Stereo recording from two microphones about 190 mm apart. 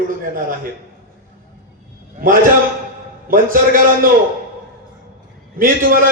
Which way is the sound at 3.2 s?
45° right (ahead or behind).